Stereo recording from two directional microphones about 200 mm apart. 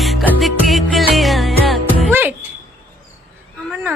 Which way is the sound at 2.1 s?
10° right (ahead or behind).